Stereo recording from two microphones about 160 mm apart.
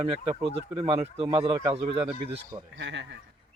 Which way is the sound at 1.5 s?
25° right (ahead or behind).